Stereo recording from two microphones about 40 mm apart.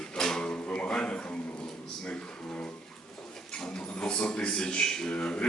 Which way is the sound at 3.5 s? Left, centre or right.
Centre.